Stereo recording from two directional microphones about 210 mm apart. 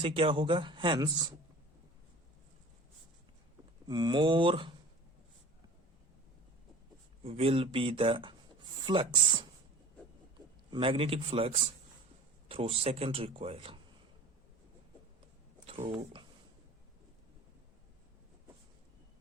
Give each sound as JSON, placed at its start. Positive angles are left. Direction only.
{"t": 0.0, "sound": "speech", "side_deg": -25}
{"t": 3.8, "sound": "speech", "side_deg": -20}
{"t": 7.3, "sound": "speech", "side_deg": -30}
{"t": 10.7, "sound": "speech", "side_deg": -25}
{"t": 15.6, "sound": "speech", "side_deg": -25}